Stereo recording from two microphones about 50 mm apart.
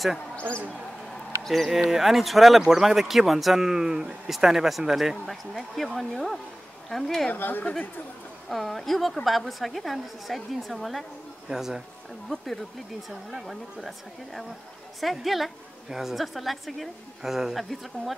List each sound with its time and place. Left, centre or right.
0.5 s speech: left
1.4 s a woman's voice: centre
7.3 s a woman's voice: left
8.5 s a woman's voice: centre
11.4 s speech: centre
13.1 s a woman's voice: centre